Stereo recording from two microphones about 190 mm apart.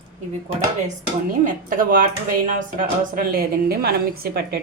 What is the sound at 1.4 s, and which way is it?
A woman's voice, 45° right (ahead or behind).